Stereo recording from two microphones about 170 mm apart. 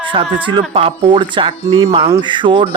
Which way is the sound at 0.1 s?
30° right (ahead or behind).